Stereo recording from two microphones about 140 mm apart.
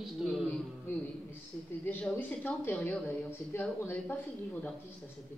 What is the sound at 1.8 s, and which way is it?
Speech, 15° left (ahead or behind).